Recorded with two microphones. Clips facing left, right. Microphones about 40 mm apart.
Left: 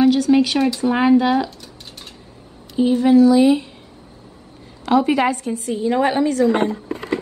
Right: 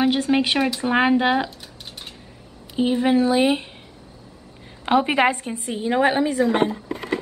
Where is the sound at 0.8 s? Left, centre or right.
Right.